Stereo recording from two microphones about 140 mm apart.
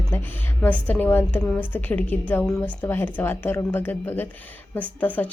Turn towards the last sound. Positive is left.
turn(degrees=10)  # may be behind; listen again after turning